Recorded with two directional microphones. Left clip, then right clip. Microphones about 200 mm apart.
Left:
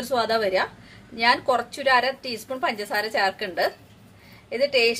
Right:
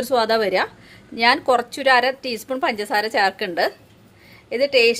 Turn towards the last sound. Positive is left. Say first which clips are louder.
# right 4 dB
turn(degrees=-55)  # may be behind; listen again after turning